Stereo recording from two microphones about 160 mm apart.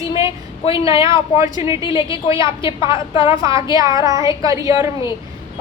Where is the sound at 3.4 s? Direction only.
20° right (ahead or behind).